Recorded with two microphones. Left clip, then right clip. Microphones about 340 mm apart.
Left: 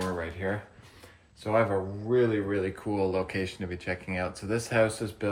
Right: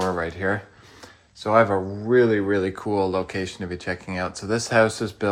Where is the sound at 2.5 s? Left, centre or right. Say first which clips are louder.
Right 7 dB; centre.